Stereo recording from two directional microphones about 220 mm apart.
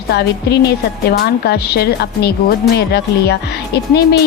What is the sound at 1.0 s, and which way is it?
A woman's voice, 45° left (ahead or behind).